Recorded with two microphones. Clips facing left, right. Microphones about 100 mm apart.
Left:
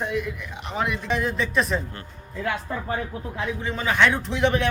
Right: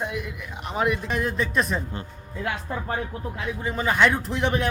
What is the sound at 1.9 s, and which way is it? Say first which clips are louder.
Speech: right 3 dB; 20° right (ahead or behind).